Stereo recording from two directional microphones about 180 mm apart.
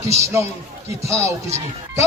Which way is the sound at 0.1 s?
15° right (ahead or behind).